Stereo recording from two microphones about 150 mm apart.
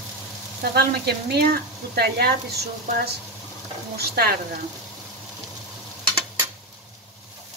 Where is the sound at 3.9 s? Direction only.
90° right.